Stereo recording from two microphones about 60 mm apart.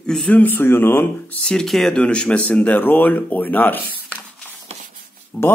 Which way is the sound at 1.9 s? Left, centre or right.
Centre.